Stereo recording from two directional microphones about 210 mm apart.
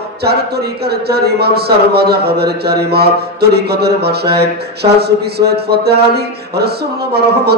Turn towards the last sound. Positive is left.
turn(degrees=-50)  # may be behind; listen again after turning